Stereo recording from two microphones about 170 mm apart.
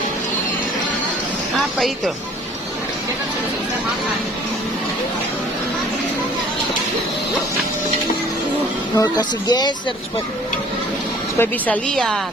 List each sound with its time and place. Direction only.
1.5 s speech: centre (ahead or behind)
9.0 s speech: 25° left (ahead or behind)
11.3 s a woman's voice: 10° left (ahead or behind)